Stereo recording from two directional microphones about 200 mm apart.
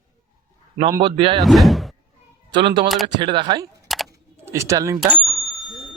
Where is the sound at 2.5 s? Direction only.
25° right (ahead or behind).